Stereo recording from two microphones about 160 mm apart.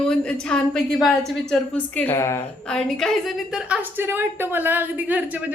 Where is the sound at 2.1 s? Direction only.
20° left (ahead or behind).